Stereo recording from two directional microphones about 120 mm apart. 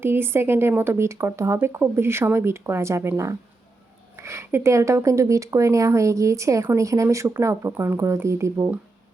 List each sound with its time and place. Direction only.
0.0 s speech: 20° right (ahead or behind)